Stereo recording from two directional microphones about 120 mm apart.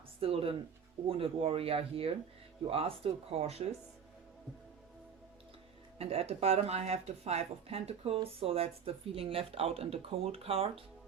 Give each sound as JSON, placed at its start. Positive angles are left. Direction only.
{"t": 0.2, "sound": "a woman's voice", "side_deg": -50}
{"t": 6.0, "sound": "a woman's voice", "side_deg": -55}